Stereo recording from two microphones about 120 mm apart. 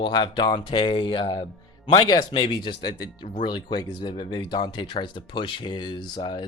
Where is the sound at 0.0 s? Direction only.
40° left (ahead or behind).